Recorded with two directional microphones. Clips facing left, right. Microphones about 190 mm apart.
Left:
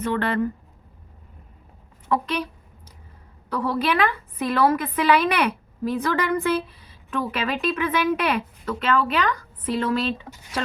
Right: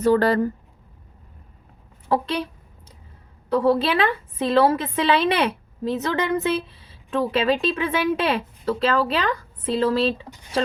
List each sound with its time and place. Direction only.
0.0 s speech: 35° right (ahead or behind)
2.0 s a woman's voice: 30° right (ahead or behind)
3.5 s a woman's voice: 25° right (ahead or behind)